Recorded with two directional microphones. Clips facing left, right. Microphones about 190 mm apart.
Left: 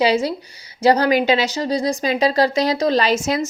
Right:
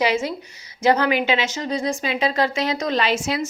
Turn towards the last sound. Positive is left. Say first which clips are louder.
# left 4 dB
turn(degrees=40)  # may be behind; listen again after turning